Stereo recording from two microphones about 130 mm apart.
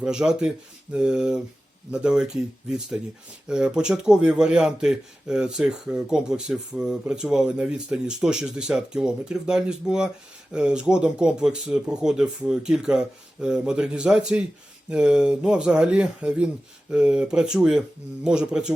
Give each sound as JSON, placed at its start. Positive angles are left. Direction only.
{"t": 0.0, "sound": "speech", "side_deg": -5}